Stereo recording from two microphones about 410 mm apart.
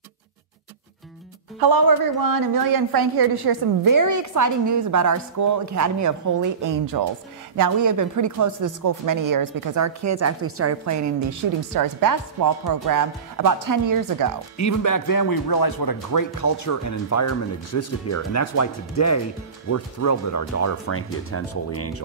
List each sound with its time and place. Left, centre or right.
1.6 s speech: right
14.6 s speech: left